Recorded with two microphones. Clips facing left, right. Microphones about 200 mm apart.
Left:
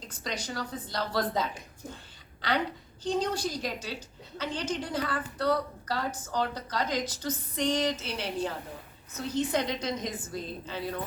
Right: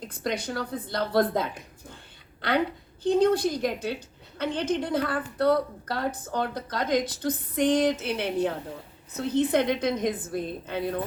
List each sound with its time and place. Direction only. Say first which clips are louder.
0.1 s a woman's voice: right 6 dB; 55° right (ahead or behind)